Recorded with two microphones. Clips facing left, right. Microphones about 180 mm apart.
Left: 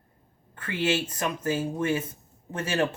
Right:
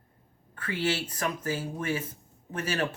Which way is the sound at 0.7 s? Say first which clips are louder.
Left 3 dB; 25° left (ahead or behind).